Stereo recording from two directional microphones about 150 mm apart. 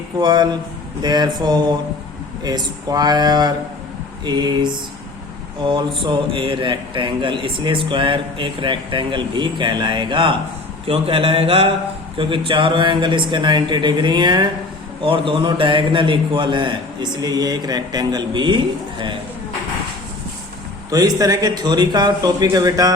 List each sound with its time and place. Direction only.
0.2 s a man's voice: 30° right (ahead or behind)
20.9 s a man's voice: 25° right (ahead or behind)